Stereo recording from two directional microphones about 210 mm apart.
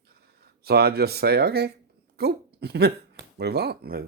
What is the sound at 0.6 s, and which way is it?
Speech, 50° right (ahead or behind).